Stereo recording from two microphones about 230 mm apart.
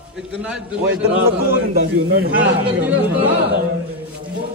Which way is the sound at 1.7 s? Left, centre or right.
Right.